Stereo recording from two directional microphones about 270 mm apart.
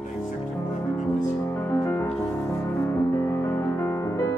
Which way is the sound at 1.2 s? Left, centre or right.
Centre.